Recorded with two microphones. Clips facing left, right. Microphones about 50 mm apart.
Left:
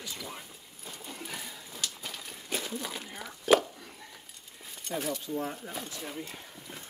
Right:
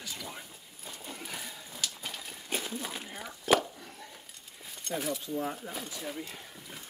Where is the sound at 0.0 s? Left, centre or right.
Centre.